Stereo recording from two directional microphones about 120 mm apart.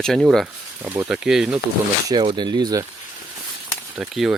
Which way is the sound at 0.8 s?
15° right (ahead or behind).